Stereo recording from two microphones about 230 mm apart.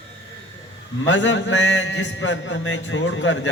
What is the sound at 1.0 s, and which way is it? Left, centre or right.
A man's voice, left.